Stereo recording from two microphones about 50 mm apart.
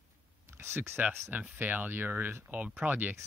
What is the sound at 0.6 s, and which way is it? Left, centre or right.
Speech, right.